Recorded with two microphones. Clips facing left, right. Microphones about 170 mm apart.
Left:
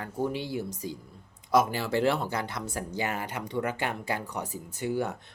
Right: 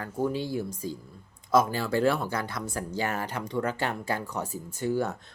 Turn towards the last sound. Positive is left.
turn(degrees=15)  # may be behind; listen again after turning